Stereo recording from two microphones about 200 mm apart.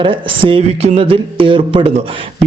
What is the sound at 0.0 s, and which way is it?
A man's voice, 25° right (ahead or behind).